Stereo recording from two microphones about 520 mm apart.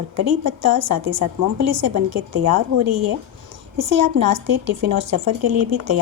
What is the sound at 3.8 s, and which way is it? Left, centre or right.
A woman's voice, right.